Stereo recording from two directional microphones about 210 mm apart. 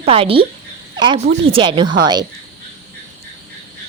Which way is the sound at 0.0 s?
25° right (ahead or behind).